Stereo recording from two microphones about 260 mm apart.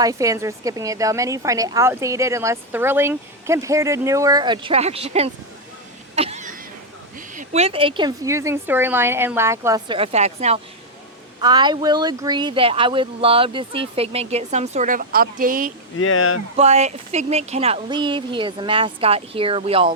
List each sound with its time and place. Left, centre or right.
0.0 s a woman's voice: centre
6.1 s a sound: right
7.2 s a woman's voice: right
16.0 s speech: left
16.6 s speech: right